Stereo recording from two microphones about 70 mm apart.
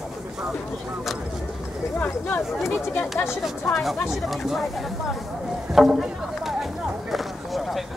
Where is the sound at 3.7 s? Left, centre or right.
Centre.